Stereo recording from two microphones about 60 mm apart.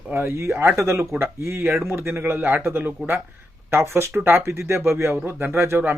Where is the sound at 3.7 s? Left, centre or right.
Right.